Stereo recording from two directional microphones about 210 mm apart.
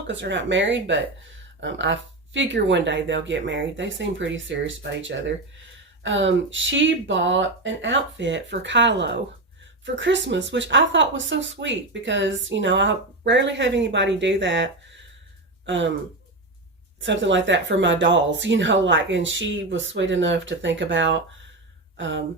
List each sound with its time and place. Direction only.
0.1 s speech: 60° right (ahead or behind)
17.0 s speech: 60° right (ahead or behind)